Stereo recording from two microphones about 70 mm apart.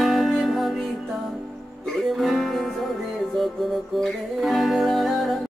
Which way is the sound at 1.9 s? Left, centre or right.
Centre.